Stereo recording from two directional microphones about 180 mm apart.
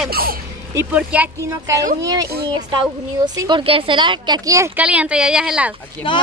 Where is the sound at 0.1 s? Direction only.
55° right (ahead or behind).